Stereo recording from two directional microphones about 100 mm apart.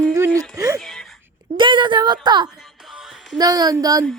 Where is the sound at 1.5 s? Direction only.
55° right (ahead or behind).